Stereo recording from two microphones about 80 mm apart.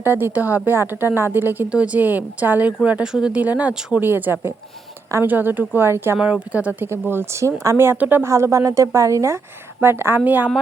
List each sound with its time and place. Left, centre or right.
0.0 s a woman's voice: right; by 4.0 s centre
4.0 s a woman's voice: right
6.1 s a woman's voice: centre; by 7.9 s right
7.9 s a woman's voice: right
8.2 s a woman's voice: right
9.8 s a woman's voice: right